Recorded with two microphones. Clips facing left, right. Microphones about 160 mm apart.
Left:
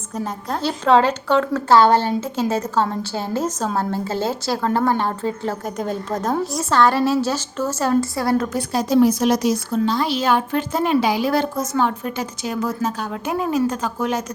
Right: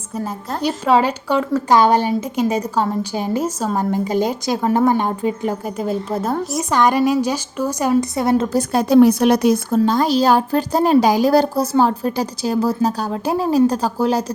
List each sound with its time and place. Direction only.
0.7 s a woman's voice: 10° right (ahead or behind)
8.5 s a woman's voice: 55° right (ahead or behind); by 14.3 s 35° right (ahead or behind)